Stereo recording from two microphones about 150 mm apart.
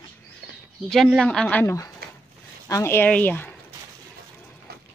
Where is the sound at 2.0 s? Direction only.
90° right.